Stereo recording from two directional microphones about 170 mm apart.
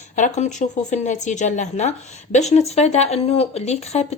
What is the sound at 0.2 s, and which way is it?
A woman's voice, 45° left (ahead or behind).